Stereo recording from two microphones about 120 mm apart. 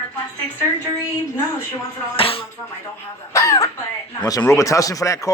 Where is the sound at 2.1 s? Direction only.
50° left (ahead or behind).